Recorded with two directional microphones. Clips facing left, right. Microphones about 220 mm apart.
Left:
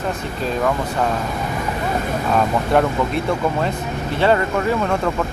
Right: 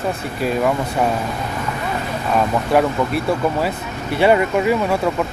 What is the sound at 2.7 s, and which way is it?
Speech, 5° right (ahead or behind).